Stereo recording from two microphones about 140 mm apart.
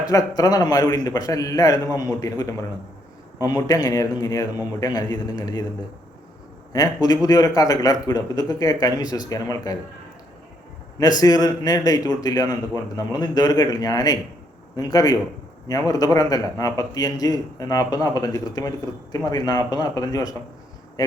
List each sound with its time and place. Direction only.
0.0 s a man's voice: 25° left (ahead or behind)
6.7 s a man's voice: 25° left (ahead or behind)
11.2 s a man's voice: 25° left (ahead or behind)